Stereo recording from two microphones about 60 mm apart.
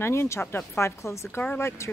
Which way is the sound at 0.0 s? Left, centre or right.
Left.